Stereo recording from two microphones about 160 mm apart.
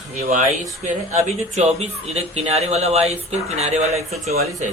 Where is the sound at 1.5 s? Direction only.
40° right (ahead or behind).